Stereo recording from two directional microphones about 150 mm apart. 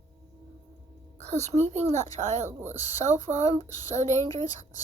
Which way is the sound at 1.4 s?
15° left (ahead or behind).